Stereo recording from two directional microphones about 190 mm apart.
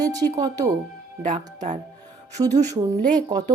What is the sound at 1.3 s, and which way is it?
Speech, 40° right (ahead or behind).